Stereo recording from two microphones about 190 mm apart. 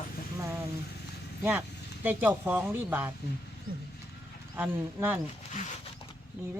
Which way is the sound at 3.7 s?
50° right (ahead or behind).